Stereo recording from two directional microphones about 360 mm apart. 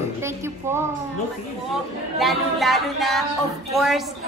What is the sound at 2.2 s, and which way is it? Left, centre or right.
A woman's voice, centre.